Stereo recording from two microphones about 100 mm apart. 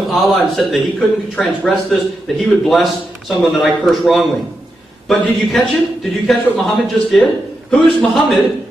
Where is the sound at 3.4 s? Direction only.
Centre (ahead or behind).